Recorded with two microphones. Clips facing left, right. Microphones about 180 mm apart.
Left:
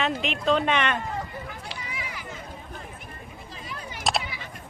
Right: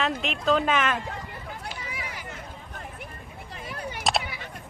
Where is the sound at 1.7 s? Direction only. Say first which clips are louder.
Even; 45° right (ahead or behind).